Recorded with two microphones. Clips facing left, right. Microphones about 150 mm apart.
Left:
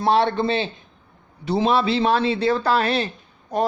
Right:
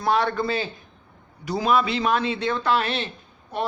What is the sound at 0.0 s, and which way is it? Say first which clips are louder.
A man's voice: left 4 dB; 30° left (ahead or behind).